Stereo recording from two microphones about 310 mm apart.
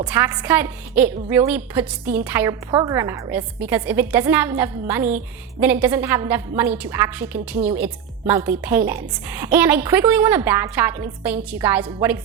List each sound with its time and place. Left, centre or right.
0.0 s a woman's voice: centre